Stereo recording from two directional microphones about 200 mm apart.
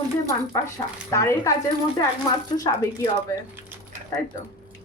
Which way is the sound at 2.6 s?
20° left (ahead or behind).